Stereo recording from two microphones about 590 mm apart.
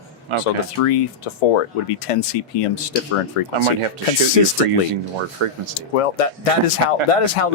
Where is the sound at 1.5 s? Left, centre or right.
Left.